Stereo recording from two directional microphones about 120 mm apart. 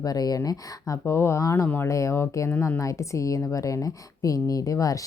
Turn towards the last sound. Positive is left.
turn(degrees=30)  # may be behind; listen again after turning